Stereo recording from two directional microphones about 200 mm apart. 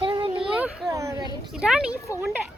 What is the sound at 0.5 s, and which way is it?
Children playing, 5° right (ahead or behind).